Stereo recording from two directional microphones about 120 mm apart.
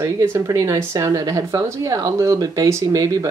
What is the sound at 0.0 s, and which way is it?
Speech, 25° right (ahead or behind).